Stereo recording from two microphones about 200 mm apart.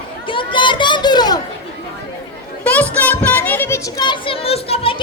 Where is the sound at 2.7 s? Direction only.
5° left (ahead or behind); by 5.0 s 30° left (ahead or behind).